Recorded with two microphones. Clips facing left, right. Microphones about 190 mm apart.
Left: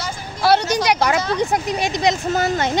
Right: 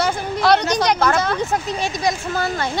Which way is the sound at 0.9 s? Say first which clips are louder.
Left 1 dB; 15° left (ahead or behind).